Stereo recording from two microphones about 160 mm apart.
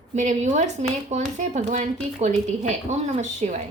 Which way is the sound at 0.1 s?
45° right (ahead or behind).